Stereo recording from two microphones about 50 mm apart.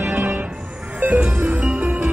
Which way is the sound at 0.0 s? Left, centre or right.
Right.